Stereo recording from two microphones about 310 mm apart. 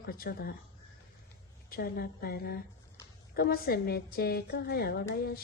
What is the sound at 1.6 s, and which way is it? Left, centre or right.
Speech, left.